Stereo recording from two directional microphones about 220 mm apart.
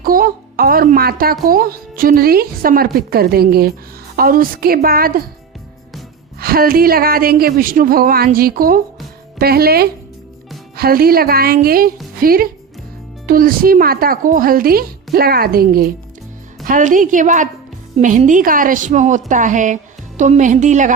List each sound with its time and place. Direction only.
0.0 s a woman's voice: 40° right (ahead or behind)
6.4 s a woman's voice: 40° right (ahead or behind)